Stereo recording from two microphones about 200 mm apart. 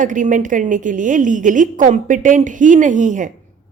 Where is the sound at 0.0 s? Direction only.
40° right (ahead or behind).